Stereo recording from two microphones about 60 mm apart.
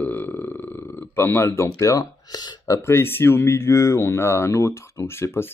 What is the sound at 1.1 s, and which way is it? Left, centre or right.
Speech, left.